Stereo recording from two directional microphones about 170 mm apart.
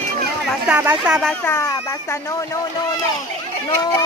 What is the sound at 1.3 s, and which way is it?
Speech, 15° left (ahead or behind).